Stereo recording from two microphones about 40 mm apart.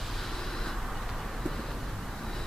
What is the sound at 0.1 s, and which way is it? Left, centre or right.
Vehicle, centre.